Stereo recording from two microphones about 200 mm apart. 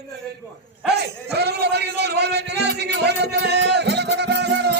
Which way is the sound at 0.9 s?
55° right (ahead or behind).